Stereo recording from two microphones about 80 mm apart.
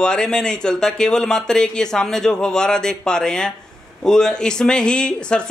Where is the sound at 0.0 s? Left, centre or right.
Centre.